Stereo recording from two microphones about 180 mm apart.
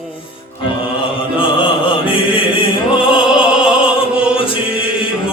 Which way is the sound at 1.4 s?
30° left (ahead or behind).